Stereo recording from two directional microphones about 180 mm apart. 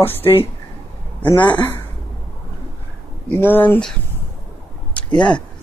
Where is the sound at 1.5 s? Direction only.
10° left (ahead or behind).